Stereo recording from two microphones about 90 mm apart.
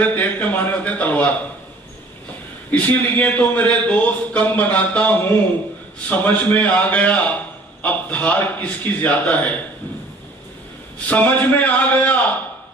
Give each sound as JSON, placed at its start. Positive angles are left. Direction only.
{"t": 0.0, "sound": "a man's voice", "side_deg": 15}
{"t": 2.7, "sound": "a man's voice", "side_deg": 15}
{"t": 11.1, "sound": "a man's voice", "side_deg": 15}